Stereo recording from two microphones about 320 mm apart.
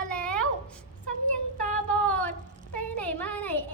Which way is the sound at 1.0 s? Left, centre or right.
Left.